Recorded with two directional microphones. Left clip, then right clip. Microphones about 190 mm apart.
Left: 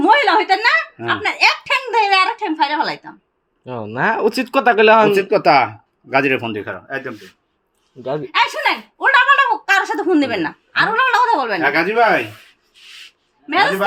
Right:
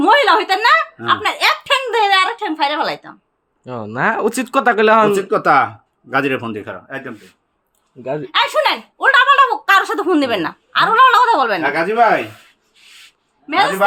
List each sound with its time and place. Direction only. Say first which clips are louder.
0.0 s a sound: right 1 dB; 25° right (ahead or behind)
1.0 s speech: right 1 dB; 15° right (ahead or behind)
5.3 s speech: even; 5° right (ahead or behind)
8.0 s a woman's voice: even; 20° right (ahead or behind)
11.6 s speech: even; 5° left (ahead or behind)
13.5 s speech: even; 5° left (ahead or behind)